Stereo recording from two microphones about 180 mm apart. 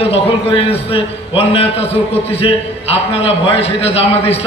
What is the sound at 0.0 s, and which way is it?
A man's voice, 30° left (ahead or behind).